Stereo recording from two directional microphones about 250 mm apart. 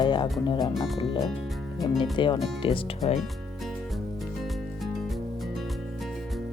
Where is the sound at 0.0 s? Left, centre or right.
Centre.